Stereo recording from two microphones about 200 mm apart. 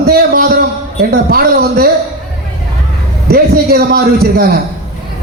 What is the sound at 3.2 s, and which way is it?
A man's voice, 50° right (ahead or behind).